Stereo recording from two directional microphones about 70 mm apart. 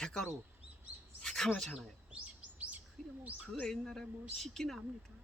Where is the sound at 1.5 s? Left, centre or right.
Centre.